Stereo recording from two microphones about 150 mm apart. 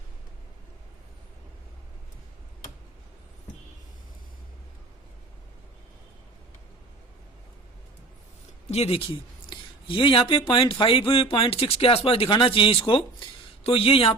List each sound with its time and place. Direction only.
8.7 s speech: 40° left (ahead or behind)